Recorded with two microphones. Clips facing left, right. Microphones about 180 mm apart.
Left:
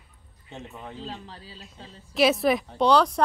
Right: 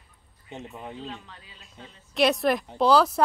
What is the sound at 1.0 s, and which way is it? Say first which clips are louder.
Speech: left 1 dB; 35° left (ahead or behind).